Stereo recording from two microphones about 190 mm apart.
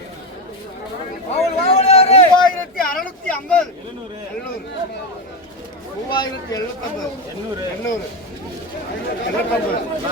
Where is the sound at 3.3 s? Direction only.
5° left (ahead or behind).